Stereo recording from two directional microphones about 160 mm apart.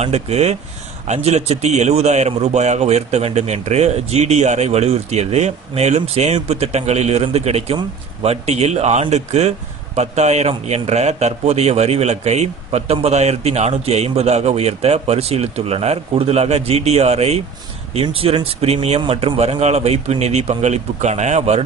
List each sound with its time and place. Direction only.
0.0 s a man's voice: 40° right (ahead or behind)